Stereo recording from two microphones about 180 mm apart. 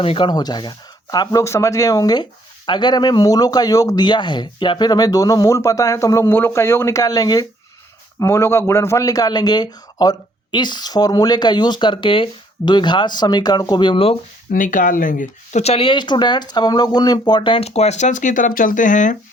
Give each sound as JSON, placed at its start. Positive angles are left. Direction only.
{"t": 0.0, "sound": "speech", "side_deg": 30}
{"t": 14.5, "sound": "speech", "side_deg": 50}